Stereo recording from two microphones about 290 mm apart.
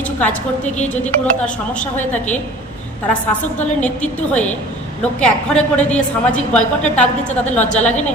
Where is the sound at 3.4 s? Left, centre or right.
Centre.